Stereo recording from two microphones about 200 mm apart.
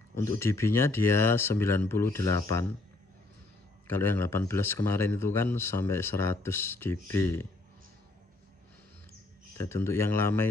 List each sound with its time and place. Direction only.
0.1 s a man's voice: 15° left (ahead or behind)
3.8 s a man's voice: 10° left (ahead or behind)
9.6 s a man's voice: 15° left (ahead or behind)